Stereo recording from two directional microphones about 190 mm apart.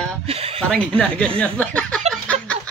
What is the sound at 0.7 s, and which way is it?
Speech, 5° left (ahead or behind).